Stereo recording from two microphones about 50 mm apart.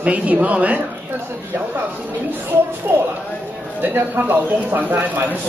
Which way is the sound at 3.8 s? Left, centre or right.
Right.